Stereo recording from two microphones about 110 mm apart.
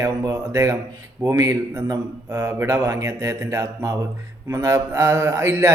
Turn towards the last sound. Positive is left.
turn(degrees=-25)  # may be behind; listen again after turning